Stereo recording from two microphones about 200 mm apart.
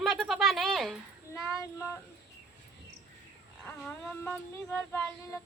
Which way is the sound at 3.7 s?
5° left (ahead or behind).